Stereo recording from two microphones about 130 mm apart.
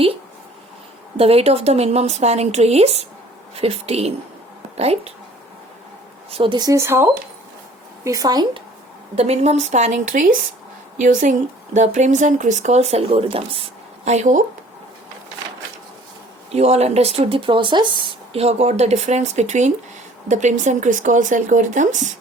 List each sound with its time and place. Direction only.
1.1 s a woman's voice: 50° right (ahead or behind)
6.3 s speech: 40° right (ahead or behind)
9.1 s a woman's voice: 55° right (ahead or behind)
16.5 s speech: 55° right (ahead or behind); by 18.2 s 35° right (ahead or behind)
18.3 s a woman's voice: 55° right (ahead or behind)